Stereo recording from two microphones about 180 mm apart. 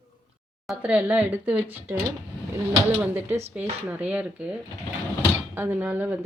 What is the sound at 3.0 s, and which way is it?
Speech, 10° right (ahead or behind).